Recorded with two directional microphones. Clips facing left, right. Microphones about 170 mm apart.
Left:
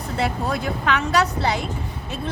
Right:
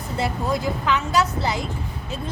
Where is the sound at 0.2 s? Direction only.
65° left (ahead or behind).